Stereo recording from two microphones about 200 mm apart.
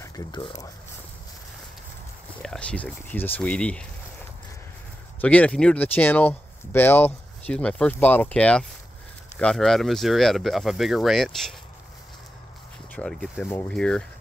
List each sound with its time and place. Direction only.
0.0 s speech: 20° left (ahead or behind)
2.4 s speech: 5° left (ahead or behind)
5.2 s speech: 5° left (ahead or behind)
12.9 s speech: centre (ahead or behind)